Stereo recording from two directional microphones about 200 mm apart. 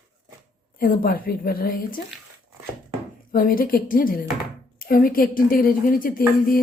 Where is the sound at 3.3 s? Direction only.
45° left (ahead or behind).